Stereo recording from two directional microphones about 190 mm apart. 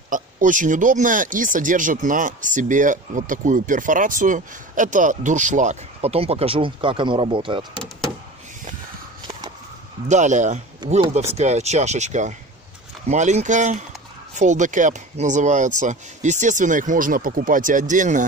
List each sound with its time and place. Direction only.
0.1 s speech: 45° right (ahead or behind); by 7.6 s 25° right (ahead or behind)
10.0 s speech: 40° right (ahead or behind)